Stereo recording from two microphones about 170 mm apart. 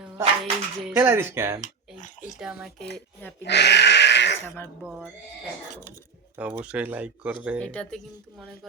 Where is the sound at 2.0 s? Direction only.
45° left (ahead or behind).